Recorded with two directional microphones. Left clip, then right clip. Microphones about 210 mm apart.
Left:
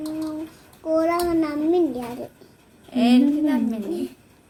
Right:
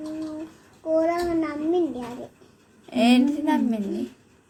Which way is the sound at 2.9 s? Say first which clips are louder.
Left 1 dB; 40° right (ahead or behind).